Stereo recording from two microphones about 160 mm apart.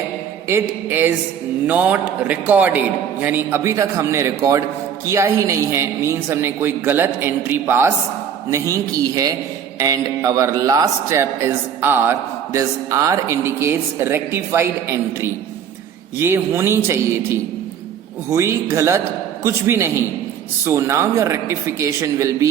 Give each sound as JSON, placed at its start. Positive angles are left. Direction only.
{"t": 0.4, "sound": "a man's voice", "side_deg": -15}